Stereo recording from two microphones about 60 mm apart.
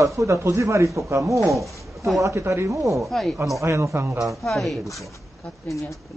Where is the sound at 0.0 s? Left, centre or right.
Right.